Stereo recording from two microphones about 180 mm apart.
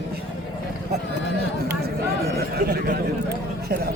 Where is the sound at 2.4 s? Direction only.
60° right (ahead or behind).